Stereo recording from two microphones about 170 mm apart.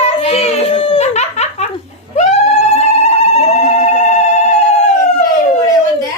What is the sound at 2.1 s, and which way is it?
Cat, 40° left (ahead or behind).